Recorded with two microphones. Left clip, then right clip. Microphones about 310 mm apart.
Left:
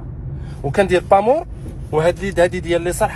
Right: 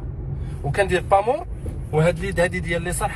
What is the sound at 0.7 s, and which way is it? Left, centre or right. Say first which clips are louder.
Speech: left 5 dB; left.